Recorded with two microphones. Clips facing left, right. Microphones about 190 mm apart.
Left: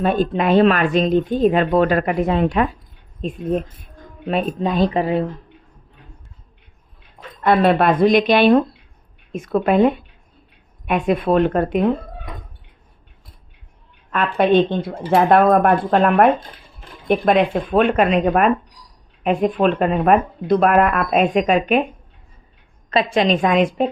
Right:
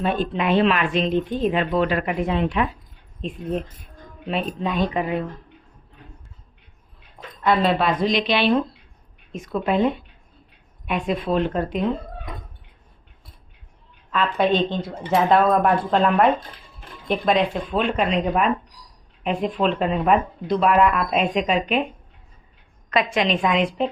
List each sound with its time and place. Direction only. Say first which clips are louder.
0.0 s a woman's voice: left 5 dB; 45° left (ahead or behind)
7.4 s speech: left 5 dB; 55° left (ahead or behind)
9.3 s speech: left 5 dB; 60° left (ahead or behind)
14.1 s speech: left 4 dB; 55° left (ahead or behind)
22.9 s a woman's voice: left 4 dB; 30° left (ahead or behind); by 23.9 s 45° left (ahead or behind)